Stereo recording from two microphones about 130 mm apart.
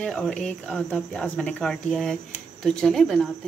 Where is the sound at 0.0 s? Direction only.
5° left (ahead or behind).